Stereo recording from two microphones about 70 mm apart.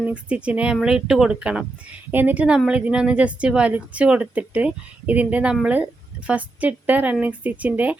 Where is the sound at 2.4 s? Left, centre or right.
Centre.